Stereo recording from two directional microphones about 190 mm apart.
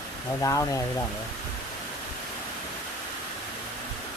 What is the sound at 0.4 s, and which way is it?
Speech, 15° left (ahead or behind).